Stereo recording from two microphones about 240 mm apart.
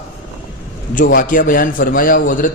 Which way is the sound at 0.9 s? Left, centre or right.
Left.